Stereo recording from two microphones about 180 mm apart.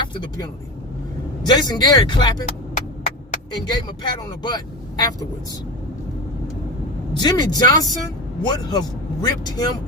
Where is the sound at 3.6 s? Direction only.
25° left (ahead or behind).